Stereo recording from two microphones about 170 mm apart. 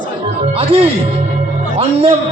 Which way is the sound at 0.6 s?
35° right (ahead or behind).